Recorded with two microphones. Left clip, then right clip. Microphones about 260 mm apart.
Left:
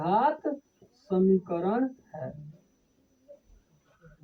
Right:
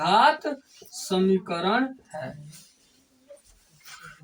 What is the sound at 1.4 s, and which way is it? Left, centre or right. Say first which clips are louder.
Speech: right 3 dB; left.